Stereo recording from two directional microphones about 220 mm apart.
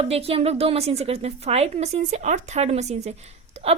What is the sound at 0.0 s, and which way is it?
A woman's voice, 25° right (ahead or behind).